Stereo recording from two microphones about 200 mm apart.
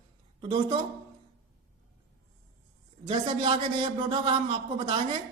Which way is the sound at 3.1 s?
25° right (ahead or behind).